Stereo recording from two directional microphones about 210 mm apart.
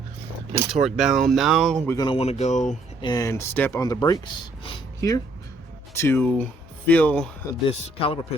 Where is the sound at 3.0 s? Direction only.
20° left (ahead or behind).